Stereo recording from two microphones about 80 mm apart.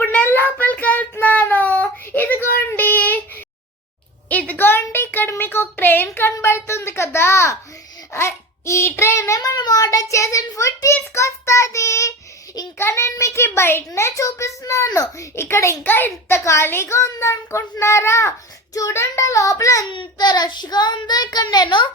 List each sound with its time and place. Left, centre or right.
0.0 s child singing: left
4.3 s a sound: centre
6.4 s a child's voice: left
9.6 s a child's voice: left
19.9 s child singing: left